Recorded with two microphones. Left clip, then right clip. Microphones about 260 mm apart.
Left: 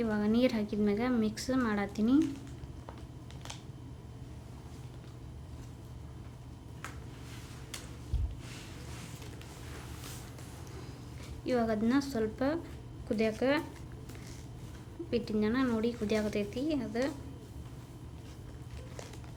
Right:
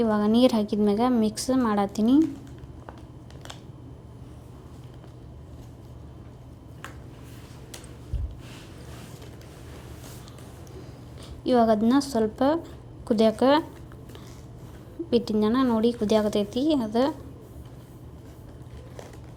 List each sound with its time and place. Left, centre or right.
0.0 s a woman's voice: centre
11.4 s a woman's voice: centre
15.1 s a woman's voice: centre